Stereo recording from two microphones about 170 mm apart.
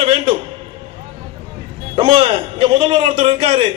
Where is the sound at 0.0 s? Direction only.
35° right (ahead or behind).